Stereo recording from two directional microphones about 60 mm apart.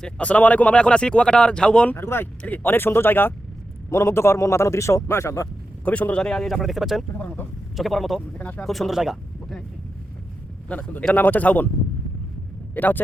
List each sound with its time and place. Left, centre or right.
0.0 s speech: left
1.9 s speech: left
3.8 s speech: left
5.8 s speech: left; by 8.2 s centre
8.4 s speech: left
8.6 s speech: centre
10.7 s speech: left
12.7 s speech: left